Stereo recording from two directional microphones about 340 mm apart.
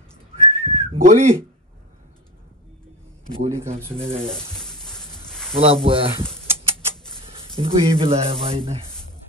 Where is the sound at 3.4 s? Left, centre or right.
Centre.